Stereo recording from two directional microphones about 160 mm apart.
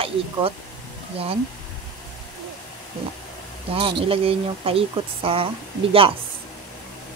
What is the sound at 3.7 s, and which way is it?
Speech, 35° right (ahead or behind).